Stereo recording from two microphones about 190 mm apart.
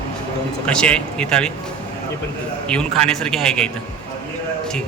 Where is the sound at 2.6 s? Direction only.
5° left (ahead or behind).